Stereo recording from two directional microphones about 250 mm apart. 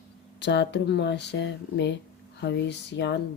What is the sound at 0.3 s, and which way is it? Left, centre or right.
Speech, left.